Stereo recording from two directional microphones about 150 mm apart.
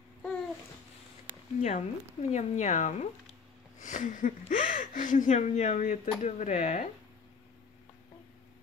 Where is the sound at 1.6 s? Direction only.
50° left (ahead or behind).